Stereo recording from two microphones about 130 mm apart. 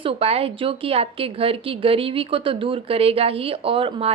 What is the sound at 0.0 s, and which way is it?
A woman's voice, 45° right (ahead or behind).